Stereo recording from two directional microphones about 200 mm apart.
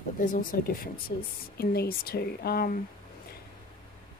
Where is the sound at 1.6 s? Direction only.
50° left (ahead or behind).